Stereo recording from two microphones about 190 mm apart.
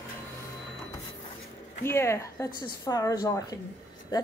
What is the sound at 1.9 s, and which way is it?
A woman's voice, 15° left (ahead or behind).